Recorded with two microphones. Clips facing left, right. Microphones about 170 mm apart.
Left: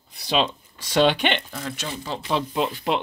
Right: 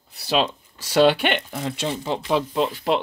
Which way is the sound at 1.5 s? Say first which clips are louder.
Right 5 dB; 25° right (ahead or behind).